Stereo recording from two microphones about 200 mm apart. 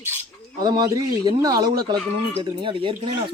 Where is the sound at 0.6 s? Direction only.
20° right (ahead or behind).